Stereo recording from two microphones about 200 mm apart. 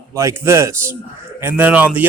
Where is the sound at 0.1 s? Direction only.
15° right (ahead or behind).